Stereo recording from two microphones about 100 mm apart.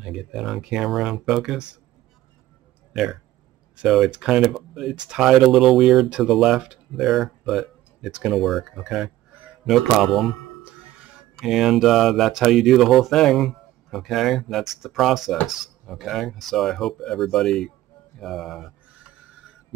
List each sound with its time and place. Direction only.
0.0 s speech: 5° right (ahead or behind)
2.9 s speech: 5° right (ahead or behind)
10.6 s speech: 10° right (ahead or behind)